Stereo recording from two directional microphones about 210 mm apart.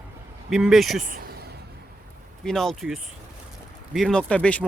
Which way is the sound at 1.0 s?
45° right (ahead or behind).